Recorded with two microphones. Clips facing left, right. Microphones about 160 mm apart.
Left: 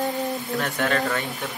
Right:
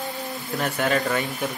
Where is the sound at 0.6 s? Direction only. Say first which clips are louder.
Right 2 dB; 10° right (ahead or behind).